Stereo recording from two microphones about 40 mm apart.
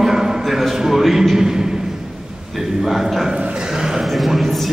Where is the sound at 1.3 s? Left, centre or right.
Centre.